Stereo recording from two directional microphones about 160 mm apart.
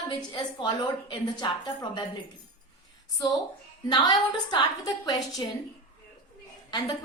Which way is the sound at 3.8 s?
25° left (ahead or behind).